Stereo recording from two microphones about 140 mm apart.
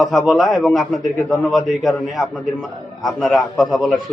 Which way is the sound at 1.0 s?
25° left (ahead or behind).